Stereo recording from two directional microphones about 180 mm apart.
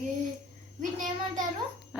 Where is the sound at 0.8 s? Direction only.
45° right (ahead or behind).